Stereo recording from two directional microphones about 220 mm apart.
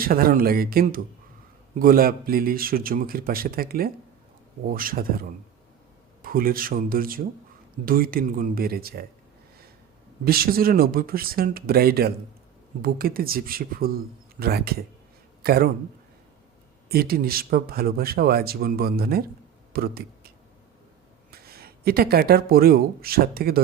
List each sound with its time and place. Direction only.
0.0 s a man's voice: 40° right (ahead or behind)
10.2 s speech: 40° right (ahead or behind)
16.9 s speech: 45° right (ahead or behind)